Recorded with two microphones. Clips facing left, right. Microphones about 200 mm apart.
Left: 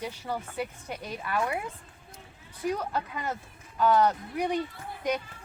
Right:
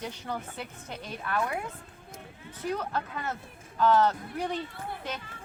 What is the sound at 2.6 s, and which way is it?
Speech, 10° left (ahead or behind).